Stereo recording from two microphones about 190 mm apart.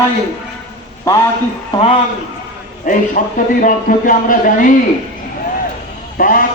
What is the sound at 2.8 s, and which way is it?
A man's voice, 45° left (ahead or behind).